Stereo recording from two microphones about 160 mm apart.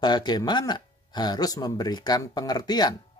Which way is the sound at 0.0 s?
25° left (ahead or behind).